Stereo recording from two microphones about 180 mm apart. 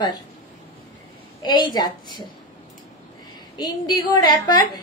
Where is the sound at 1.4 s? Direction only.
25° left (ahead or behind).